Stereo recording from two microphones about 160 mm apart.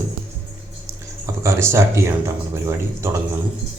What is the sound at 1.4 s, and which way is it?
Speech, 15° right (ahead or behind).